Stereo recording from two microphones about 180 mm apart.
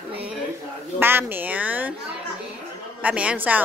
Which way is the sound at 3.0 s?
5° right (ahead or behind).